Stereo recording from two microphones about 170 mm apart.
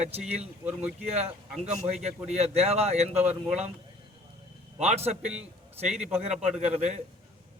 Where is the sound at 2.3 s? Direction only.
40° right (ahead or behind).